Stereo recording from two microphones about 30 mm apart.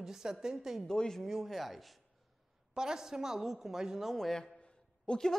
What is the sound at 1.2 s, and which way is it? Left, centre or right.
Speech, centre.